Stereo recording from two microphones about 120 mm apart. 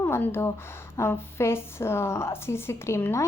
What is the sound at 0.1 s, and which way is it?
A woman's voice, 20° left (ahead or behind).